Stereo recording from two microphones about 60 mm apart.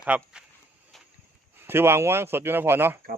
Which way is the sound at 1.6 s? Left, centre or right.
Right.